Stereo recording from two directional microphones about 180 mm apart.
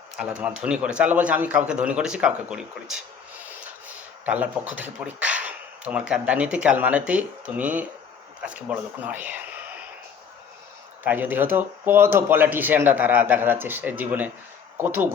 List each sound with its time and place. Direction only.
0.3 s speech: 5° right (ahead or behind)
4.3 s speech: 10° right (ahead or behind)
11.0 s speech: 10° right (ahead or behind)